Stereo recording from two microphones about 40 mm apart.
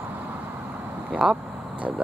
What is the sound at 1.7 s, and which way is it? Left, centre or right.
Speech, right.